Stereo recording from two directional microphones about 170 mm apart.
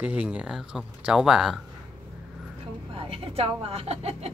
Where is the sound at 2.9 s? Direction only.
35° right (ahead or behind).